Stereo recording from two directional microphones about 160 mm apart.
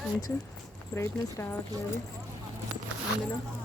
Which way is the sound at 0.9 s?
15° left (ahead or behind).